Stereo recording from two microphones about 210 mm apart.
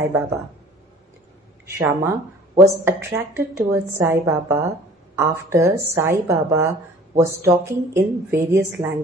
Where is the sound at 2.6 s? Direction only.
10° right (ahead or behind).